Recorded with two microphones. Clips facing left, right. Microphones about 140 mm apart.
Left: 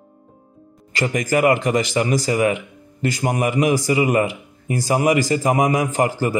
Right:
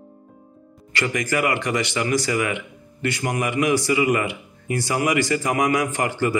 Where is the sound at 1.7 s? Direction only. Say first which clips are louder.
Left 3 dB; 30° left (ahead or behind).